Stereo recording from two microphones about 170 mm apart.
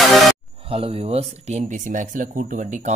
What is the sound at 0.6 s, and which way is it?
Speech, 35° right (ahead or behind).